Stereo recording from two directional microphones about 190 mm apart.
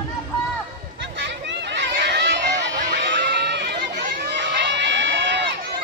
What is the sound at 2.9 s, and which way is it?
Crowd, 65° right (ahead or behind).